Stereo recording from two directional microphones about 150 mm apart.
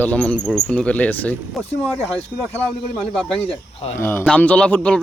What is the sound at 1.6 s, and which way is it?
Speech, centre (ahead or behind).